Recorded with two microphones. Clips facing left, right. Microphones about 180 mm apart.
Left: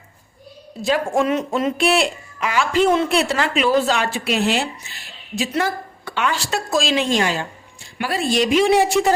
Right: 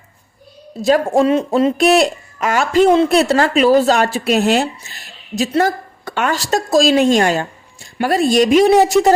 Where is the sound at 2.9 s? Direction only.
35° right (ahead or behind).